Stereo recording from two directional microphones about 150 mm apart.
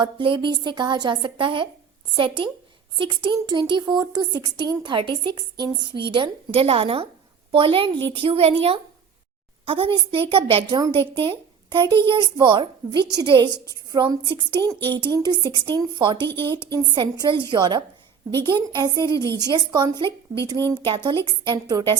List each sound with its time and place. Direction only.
0.0 s a woman's voice: 35° right (ahead or behind)